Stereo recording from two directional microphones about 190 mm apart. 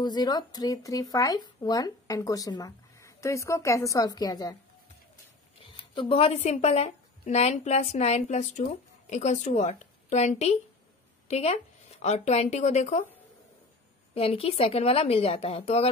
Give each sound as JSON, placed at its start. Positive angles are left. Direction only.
{"t": 0.0, "sound": "speech", "side_deg": 20}
{"t": 5.6, "sound": "speech", "side_deg": 30}
{"t": 14.1, "sound": "speech", "side_deg": 30}